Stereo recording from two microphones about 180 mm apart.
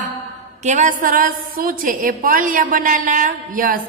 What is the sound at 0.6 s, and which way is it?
A woman's voice, 40° right (ahead or behind).